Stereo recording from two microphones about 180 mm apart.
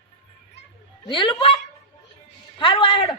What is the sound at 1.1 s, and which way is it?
Speech, 30° left (ahead or behind).